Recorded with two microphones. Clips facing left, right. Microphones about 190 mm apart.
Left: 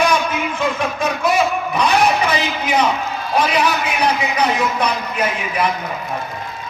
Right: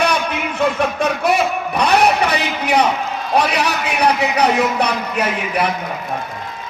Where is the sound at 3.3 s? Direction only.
70° right (ahead or behind).